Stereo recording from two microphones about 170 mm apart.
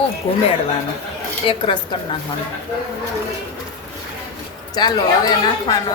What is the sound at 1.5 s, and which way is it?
Speech, 30° left (ahead or behind).